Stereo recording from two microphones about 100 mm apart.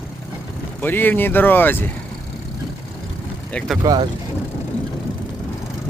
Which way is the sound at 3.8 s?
30° right (ahead or behind).